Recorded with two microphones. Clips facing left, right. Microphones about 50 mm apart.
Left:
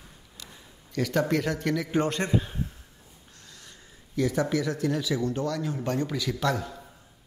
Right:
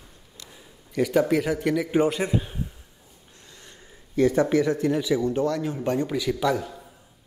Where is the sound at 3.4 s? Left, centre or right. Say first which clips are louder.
Right 2 dB; right.